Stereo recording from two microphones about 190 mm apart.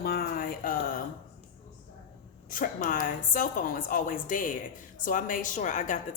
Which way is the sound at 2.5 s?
45° left (ahead or behind).